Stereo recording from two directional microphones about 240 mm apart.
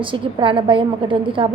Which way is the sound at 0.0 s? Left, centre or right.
Right.